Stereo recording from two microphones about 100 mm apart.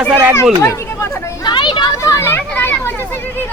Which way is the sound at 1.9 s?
35° left (ahead or behind).